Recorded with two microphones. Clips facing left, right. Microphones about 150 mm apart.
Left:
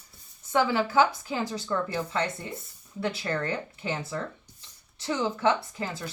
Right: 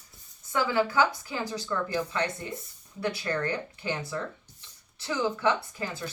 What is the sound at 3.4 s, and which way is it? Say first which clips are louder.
Speech: even; 25° left (ahead or behind).